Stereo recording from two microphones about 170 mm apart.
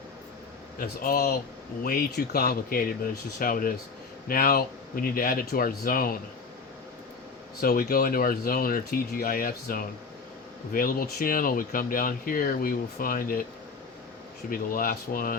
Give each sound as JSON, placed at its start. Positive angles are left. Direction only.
{"t": 0.8, "sound": "speech", "side_deg": 60}
{"t": 7.6, "sound": "speech", "side_deg": 60}
{"t": 14.5, "sound": "speech", "side_deg": 55}